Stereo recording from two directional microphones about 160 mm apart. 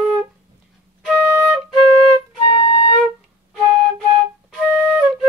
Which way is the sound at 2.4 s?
30° left (ahead or behind).